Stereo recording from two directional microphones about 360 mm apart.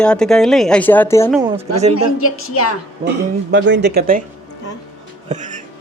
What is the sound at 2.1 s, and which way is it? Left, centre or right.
Speech, left.